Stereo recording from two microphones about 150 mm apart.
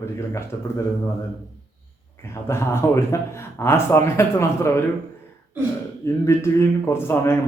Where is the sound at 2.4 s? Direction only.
15° left (ahead or behind).